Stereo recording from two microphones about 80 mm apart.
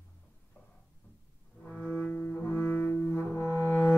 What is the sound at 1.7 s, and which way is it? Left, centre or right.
Cello, centre.